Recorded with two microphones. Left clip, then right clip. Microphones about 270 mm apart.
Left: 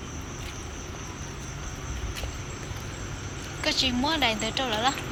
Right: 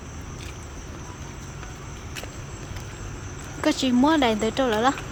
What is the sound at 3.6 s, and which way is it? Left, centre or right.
Speech, right.